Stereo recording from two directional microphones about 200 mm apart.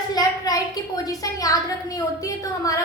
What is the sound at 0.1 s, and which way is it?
A woman's voice, 20° left (ahead or behind).